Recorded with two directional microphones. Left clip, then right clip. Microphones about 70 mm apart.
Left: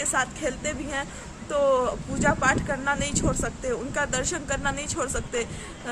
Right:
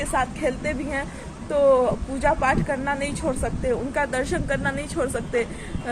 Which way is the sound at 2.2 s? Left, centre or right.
Centre.